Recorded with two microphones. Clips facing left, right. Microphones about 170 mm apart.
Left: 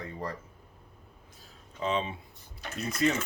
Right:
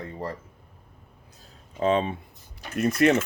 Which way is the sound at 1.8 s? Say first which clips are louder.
Right 7 dB; 50° right (ahead or behind).